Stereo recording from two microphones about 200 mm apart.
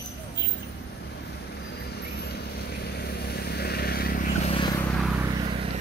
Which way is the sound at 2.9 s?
55° left (ahead or behind).